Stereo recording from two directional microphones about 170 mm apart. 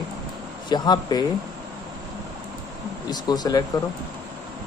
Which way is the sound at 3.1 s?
25° left (ahead or behind).